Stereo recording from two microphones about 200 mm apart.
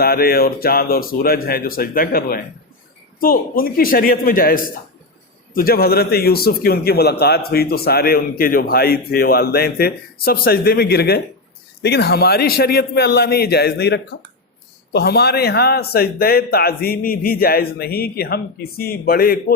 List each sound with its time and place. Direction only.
0.0 s a man's voice: 50° left (ahead or behind)